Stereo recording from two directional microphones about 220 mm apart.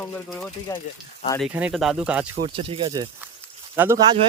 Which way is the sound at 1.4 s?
5° right (ahead or behind).